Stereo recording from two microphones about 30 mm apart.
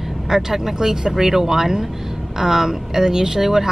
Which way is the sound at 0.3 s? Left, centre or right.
Centre.